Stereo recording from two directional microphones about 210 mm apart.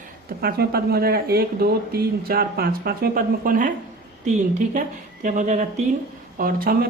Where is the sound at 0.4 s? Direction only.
45° right (ahead or behind).